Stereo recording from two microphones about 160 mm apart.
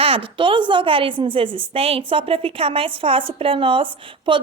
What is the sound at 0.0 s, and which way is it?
A woman's voice, 35° right (ahead or behind).